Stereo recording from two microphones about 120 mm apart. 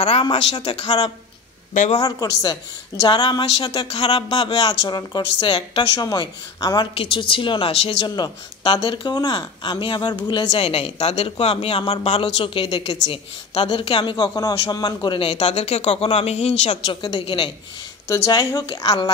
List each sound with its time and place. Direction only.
0.2 s speech: 40° left (ahead or behind)
3.9 s speech: 55° left (ahead or behind)
4.3 s speech: 35° left (ahead or behind)
6.0 s speech: 30° left (ahead or behind)
7.0 s a woman's voice: 45° left (ahead or behind)
8.0 s speech: 35° left (ahead or behind)
10.5 s speech: 55° left (ahead or behind)
11.8 s a woman's voice: 40° left (ahead or behind)
15.4 s speech: 65° left (ahead or behind)
16.9 s a woman's voice: 40° left (ahead or behind)
18.0 s speech: 25° left (ahead or behind)